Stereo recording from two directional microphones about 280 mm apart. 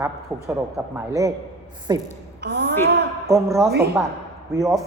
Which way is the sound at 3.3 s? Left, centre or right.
Centre.